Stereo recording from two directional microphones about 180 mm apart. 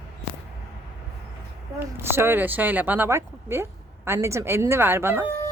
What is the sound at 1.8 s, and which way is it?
Speech, 10° right (ahead or behind).